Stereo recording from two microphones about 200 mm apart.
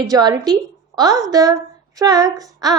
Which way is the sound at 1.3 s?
20° right (ahead or behind).